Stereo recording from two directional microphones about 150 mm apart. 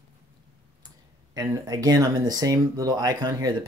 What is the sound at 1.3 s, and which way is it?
Speech, 25° right (ahead or behind).